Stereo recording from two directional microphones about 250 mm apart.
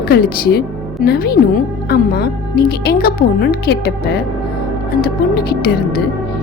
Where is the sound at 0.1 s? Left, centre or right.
Left.